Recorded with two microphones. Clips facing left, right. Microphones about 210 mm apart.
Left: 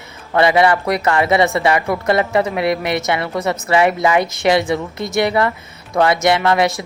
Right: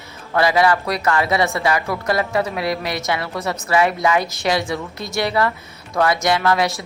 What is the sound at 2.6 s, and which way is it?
Speech, 55° left (ahead or behind).